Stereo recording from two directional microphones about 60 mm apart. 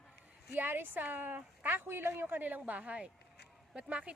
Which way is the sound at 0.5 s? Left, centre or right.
Right.